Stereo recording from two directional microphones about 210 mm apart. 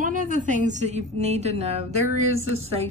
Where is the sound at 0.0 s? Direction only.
40° right (ahead or behind).